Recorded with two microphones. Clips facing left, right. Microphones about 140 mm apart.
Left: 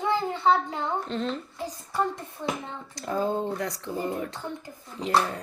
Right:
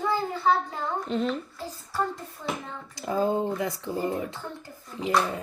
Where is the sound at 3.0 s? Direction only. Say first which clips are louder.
Right 2 dB; 5° right (ahead or behind).